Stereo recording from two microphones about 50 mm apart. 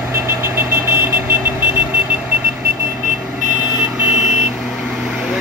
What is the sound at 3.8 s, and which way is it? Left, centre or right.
Vehicle, centre.